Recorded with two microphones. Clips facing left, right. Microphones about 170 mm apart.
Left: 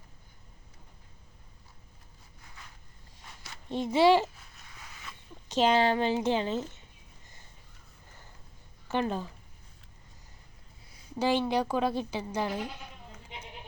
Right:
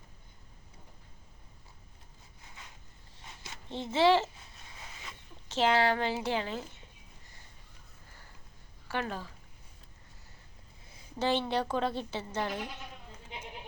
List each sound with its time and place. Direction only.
3.7 s a woman's voice: 15° left (ahead or behind)
5.5 s a woman's voice: 20° left (ahead or behind)
8.9 s a woman's voice: 20° left (ahead or behind)
11.2 s a woman's voice: 10° left (ahead or behind)